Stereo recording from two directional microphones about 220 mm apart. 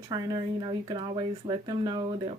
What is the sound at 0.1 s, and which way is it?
A woman's voice, 20° right (ahead or behind).